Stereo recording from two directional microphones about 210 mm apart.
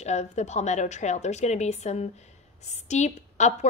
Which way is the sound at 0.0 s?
30° left (ahead or behind).